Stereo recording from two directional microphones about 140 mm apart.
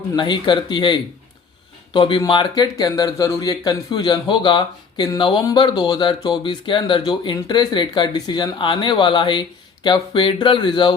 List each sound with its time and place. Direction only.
0.2 s speech: 35° left (ahead or behind)